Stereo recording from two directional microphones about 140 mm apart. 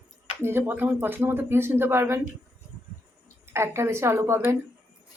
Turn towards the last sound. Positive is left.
turn(degrees=-20)  # may be behind; listen again after turning